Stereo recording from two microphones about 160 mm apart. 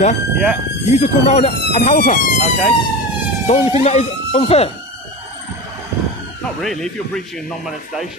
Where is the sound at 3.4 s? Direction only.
40° left (ahead or behind).